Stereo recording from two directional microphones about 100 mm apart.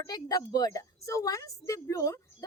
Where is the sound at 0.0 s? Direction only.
40° left (ahead or behind).